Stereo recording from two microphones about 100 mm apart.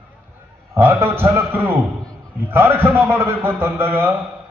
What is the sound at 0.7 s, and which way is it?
A man's voice, 25° right (ahead or behind).